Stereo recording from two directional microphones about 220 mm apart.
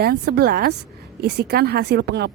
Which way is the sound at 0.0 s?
45° right (ahead or behind).